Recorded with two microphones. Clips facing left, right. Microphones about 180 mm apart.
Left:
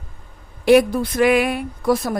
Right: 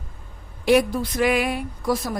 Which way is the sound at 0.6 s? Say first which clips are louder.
Left 5 dB; 60° left (ahead or behind).